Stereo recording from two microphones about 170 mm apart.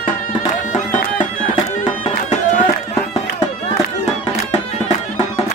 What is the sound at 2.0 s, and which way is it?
Music, 40° left (ahead or behind).